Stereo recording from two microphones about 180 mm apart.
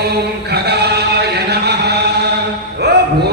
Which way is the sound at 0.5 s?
65° right (ahead or behind).